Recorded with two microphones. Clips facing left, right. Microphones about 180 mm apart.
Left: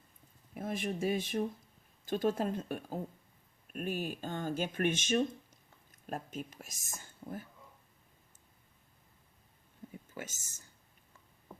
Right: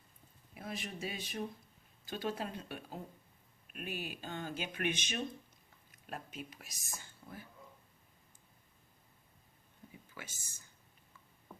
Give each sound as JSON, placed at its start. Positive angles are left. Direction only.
{"t": 0.5, "sound": "speech", "side_deg": 50}
{"t": 7.0, "sound": "whispering", "side_deg": 45}
{"t": 10.2, "sound": "speech", "side_deg": 45}